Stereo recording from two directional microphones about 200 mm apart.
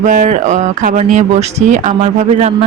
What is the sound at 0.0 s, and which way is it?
Speech, 40° right (ahead or behind).